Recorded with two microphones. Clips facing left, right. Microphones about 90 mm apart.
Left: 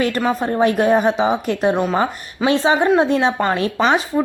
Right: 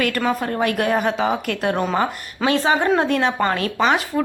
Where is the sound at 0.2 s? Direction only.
25° left (ahead or behind).